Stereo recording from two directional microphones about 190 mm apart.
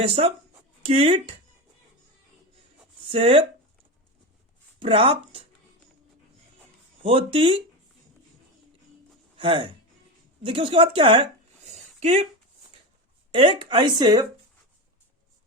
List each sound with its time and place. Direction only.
0.0 s speech: 30° right (ahead or behind)
3.1 s speech: 30° right (ahead or behind)
4.8 s speech: 30° right (ahead or behind)
7.0 s speech: 25° right (ahead or behind)
9.4 s speech: 30° right (ahead or behind)
13.3 s speech: 25° right (ahead or behind)